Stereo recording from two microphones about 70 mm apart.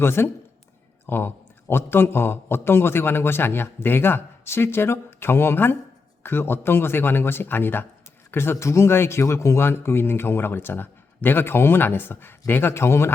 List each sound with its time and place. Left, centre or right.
0.0 s speech: left